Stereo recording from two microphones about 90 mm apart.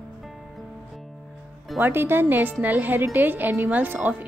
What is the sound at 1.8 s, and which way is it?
A woman's voice, 25° right (ahead or behind).